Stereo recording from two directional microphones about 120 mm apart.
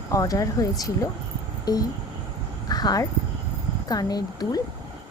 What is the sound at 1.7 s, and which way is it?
Speech, 35° left (ahead or behind).